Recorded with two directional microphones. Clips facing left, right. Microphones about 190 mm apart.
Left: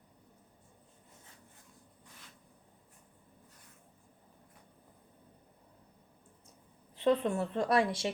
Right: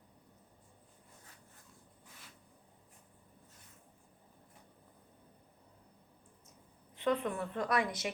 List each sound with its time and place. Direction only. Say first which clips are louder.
6.9 s speech: left 5 dB; 30° left (ahead or behind)